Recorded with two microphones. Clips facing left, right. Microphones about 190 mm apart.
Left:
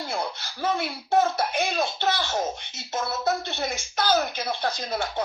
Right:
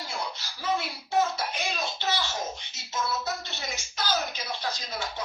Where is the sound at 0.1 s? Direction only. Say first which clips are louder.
Left 5 dB; 55° left (ahead or behind).